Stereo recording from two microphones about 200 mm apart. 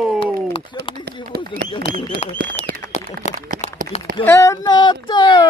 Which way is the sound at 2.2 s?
35° left (ahead or behind).